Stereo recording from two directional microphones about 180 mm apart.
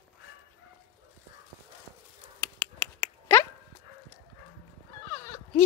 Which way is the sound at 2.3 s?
10° left (ahead or behind).